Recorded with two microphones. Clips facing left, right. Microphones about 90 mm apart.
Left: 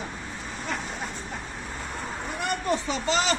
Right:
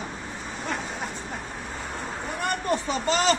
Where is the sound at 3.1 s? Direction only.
45° right (ahead or behind).